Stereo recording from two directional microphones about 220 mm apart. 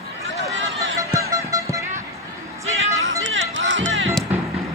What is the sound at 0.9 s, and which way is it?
Music, 15° right (ahead or behind).